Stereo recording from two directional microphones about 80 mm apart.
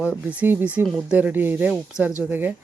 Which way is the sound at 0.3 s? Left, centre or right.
Right.